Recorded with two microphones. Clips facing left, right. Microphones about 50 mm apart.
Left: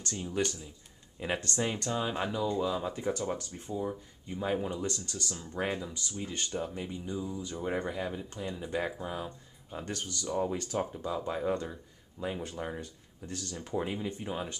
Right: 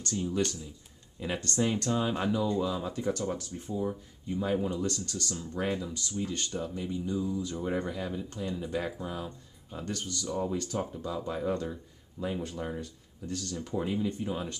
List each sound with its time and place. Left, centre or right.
0.0 s speech: centre